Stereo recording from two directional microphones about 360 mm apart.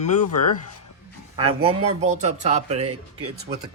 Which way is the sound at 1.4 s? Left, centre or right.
Centre.